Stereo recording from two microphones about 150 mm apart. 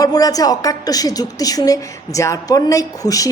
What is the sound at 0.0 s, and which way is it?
A woman's voice, 25° left (ahead or behind).